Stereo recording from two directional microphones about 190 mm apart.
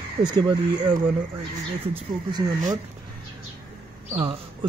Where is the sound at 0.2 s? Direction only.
25° right (ahead or behind).